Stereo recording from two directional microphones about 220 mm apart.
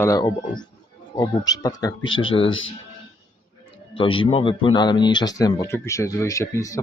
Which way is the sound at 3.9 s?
25° left (ahead or behind).